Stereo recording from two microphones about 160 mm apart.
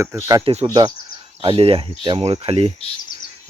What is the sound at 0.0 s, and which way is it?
Speech, 15° right (ahead or behind).